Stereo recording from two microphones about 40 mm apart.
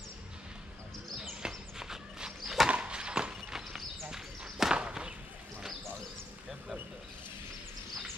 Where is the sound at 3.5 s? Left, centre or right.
Centre.